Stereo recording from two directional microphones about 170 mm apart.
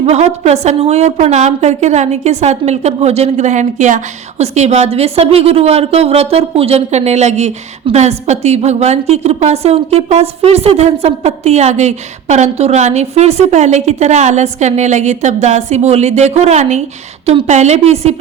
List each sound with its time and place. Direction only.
0.0 s a woman's voice: 40° right (ahead or behind)